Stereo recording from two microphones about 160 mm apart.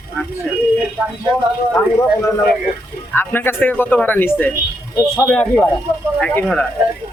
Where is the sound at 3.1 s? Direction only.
10° left (ahead or behind).